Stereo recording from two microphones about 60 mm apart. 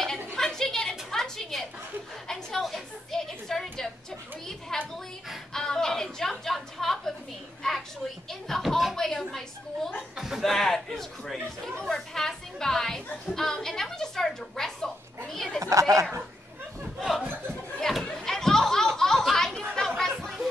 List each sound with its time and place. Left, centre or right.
0.0 s a sound: centre
6.1 s a woman's voice: centre
10.1 s chuckle: centre
10.4 s a woman's voice: centre
15.6 s speech: right
17.5 s a sound: centre
20.0 s chatter: centre